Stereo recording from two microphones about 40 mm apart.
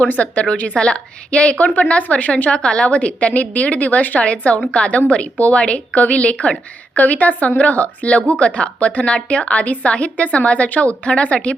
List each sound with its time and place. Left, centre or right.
0.0 s a woman's voice: left
2.5 s a woman's voice: left
4.2 s a woman's voice: left
6.9 s a woman's voice: left